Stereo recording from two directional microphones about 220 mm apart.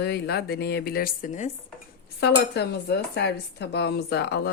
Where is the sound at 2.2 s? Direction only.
50° left (ahead or behind).